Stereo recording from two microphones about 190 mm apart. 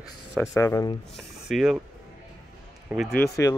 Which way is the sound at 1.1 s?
Centre (ahead or behind).